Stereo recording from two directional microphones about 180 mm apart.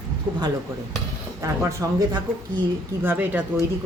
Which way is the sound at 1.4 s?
20° right (ahead or behind).